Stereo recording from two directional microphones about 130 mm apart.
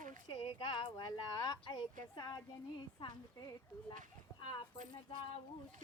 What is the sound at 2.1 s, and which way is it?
Speech, 30° left (ahead or behind).